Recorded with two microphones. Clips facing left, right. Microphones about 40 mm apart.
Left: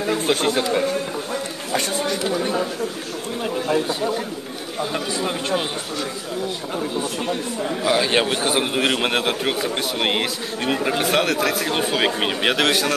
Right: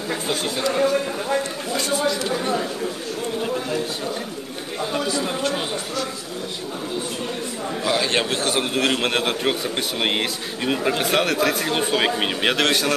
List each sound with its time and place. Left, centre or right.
0.3 s speech: left
1.7 s a sound: left
2.2 s speech: centre
5.1 s speech: left
7.8 s a man's voice: centre